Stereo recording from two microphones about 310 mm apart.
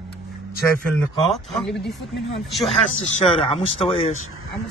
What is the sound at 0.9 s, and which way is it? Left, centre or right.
Speech, centre.